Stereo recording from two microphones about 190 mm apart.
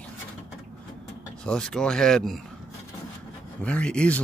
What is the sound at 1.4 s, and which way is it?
Speech, 5° left (ahead or behind).